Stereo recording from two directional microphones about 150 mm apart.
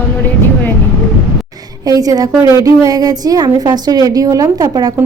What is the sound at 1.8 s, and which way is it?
Speech, 25° right (ahead or behind).